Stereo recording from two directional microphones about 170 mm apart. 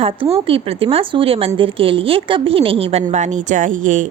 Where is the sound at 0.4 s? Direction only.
35° right (ahead or behind).